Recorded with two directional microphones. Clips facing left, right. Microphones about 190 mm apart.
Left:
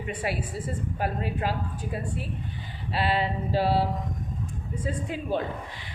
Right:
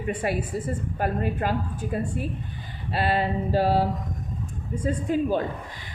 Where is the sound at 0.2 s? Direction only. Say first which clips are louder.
Right 4 dB; 50° right (ahead or behind).